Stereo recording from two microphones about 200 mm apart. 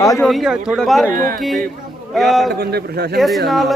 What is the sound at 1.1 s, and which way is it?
Speech, 40° right (ahead or behind).